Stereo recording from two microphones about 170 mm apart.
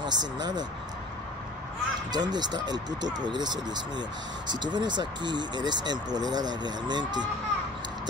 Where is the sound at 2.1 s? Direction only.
25° right (ahead or behind).